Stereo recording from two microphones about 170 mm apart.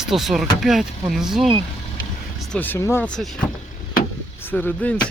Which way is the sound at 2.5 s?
10° left (ahead or behind).